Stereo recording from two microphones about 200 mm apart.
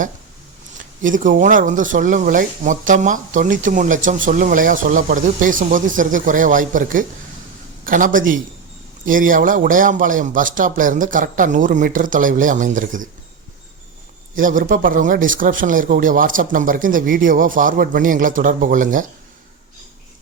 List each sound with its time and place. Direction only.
1.0 s speech: 40° right (ahead or behind)
14.3 s speech: 45° right (ahead or behind)